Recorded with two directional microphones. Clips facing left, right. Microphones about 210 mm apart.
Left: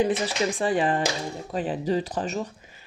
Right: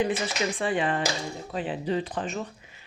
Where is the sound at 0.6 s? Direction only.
40° left (ahead or behind).